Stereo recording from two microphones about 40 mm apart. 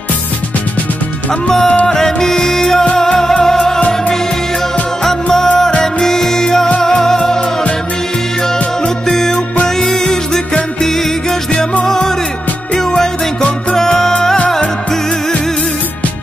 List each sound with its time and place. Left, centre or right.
1.5 s music: centre
5.0 s music: centre
8.8 s music: centre